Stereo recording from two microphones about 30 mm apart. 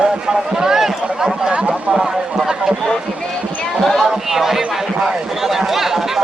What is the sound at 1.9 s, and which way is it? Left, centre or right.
Speech, centre.